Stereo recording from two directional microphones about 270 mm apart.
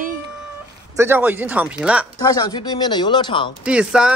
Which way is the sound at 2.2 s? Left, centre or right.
Centre.